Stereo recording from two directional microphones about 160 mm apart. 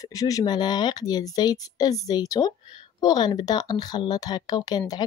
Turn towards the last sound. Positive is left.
turn(degrees=25)  # may be behind; listen again after turning